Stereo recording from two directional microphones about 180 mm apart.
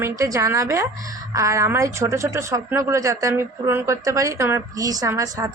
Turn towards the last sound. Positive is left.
turn(degrees=-20)  # may be behind; listen again after turning